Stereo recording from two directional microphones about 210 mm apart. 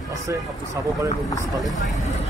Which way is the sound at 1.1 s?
15° left (ahead or behind).